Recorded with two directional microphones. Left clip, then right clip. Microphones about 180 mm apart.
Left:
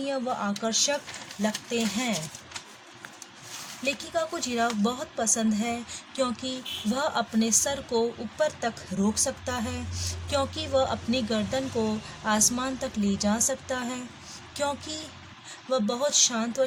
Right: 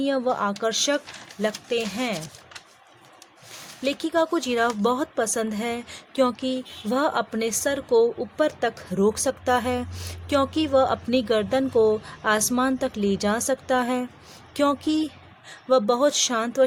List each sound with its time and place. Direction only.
0.0 s speech: 45° right (ahead or behind)
3.8 s speech: 45° right (ahead or behind)